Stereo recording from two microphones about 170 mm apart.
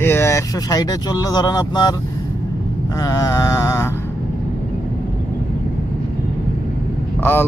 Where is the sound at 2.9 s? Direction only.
20° left (ahead or behind).